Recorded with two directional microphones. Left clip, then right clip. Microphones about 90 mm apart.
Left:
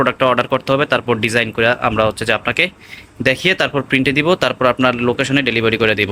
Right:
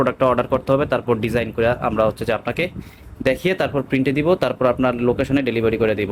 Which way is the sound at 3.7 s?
15° right (ahead or behind).